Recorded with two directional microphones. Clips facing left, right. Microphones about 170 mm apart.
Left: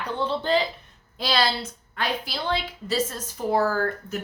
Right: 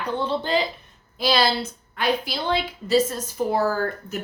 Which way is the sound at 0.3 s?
15° right (ahead or behind).